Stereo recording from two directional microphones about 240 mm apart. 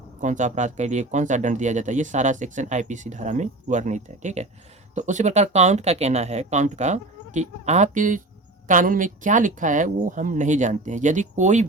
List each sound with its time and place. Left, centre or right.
0.2 s speech: right